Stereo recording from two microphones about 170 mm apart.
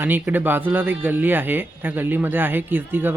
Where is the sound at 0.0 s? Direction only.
10° right (ahead or behind).